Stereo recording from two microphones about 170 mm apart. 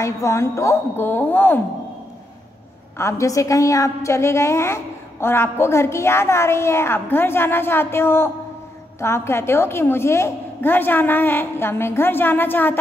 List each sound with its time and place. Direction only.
0.0 s a woman's voice: 15° left (ahead or behind)
3.0 s a woman's voice: 15° left (ahead or behind)